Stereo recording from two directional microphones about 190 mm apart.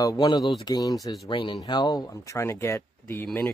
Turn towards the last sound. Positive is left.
turn(degrees=10)  # may be behind; listen again after turning